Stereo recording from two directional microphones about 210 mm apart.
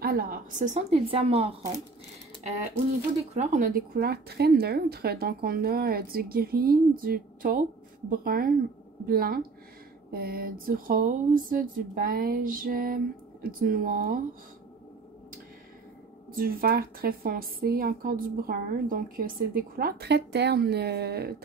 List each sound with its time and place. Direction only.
0.0 s a woman's voice: 45° right (ahead or behind)
16.3 s a woman's voice: 45° right (ahead or behind)